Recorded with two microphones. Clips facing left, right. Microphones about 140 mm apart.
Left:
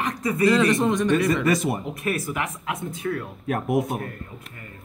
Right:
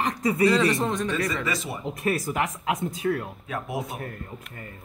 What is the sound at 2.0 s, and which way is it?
Speech, 40° right (ahead or behind).